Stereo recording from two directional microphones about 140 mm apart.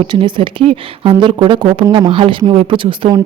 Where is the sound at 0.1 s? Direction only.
35° right (ahead or behind).